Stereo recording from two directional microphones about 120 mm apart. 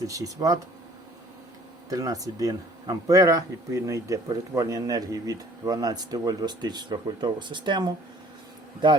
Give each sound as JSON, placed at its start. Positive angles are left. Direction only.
{"t": 0.1, "sound": "speech", "side_deg": -30}
{"t": 1.9, "sound": "speech", "side_deg": -30}